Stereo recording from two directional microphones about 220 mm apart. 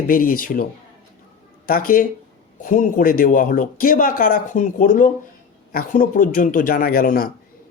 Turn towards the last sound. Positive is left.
turn(degrees=40)  # may be behind; listen again after turning